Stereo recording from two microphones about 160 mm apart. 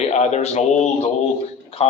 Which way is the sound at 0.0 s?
45° left (ahead or behind).